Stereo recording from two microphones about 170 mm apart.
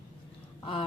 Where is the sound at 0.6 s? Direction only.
30° left (ahead or behind).